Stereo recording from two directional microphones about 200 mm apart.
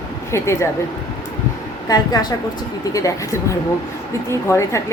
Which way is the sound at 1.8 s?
20° left (ahead or behind).